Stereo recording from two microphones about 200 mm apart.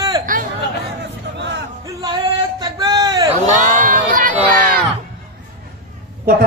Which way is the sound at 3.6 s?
40° right (ahead or behind).